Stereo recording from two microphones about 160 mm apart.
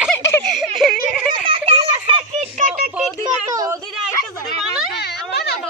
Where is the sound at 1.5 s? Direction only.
35° right (ahead or behind).